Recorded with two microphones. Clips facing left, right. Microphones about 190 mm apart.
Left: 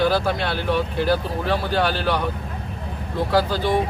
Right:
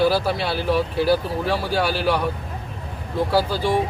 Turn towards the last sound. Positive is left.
turn(degrees=-10)  # may be behind; listen again after turning